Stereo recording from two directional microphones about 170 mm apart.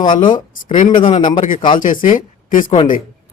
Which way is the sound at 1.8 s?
50° left (ahead or behind).